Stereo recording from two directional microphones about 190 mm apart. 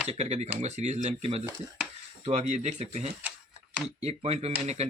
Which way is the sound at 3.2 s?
10° right (ahead or behind).